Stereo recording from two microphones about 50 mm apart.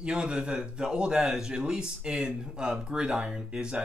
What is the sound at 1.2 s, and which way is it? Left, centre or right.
Speech, centre.